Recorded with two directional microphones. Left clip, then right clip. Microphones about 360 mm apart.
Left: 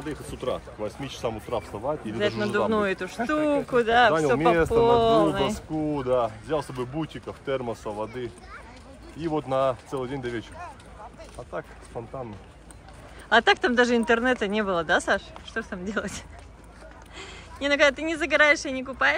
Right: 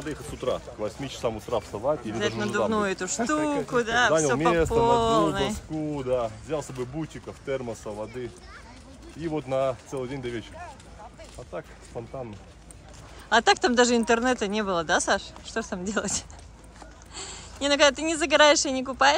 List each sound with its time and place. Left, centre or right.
0.0 s speech: centre
13.3 s speech: centre